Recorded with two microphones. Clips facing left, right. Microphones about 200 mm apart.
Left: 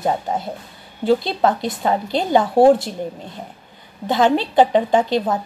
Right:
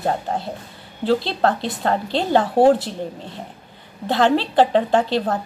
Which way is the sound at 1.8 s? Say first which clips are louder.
Left 1 dB; 10° left (ahead or behind).